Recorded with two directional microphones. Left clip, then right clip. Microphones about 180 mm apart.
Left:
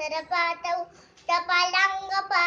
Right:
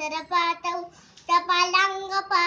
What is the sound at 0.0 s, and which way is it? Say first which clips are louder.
Child singing: right 2 dB; 10° left (ahead or behind).